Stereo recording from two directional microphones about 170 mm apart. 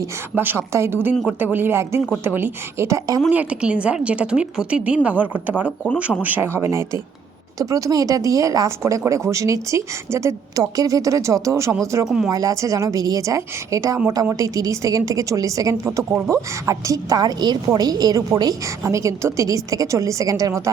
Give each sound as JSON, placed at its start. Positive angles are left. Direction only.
{"t": 0.0, "sound": "a woman's voice", "side_deg": -15}
{"t": 1.1, "sound": "speech", "side_deg": 0}
{"t": 1.4, "sound": "a woman's voice", "side_deg": -10}
{"t": 12.0, "sound": "speech", "side_deg": -5}
{"t": 12.3, "sound": "a woman's voice", "side_deg": -20}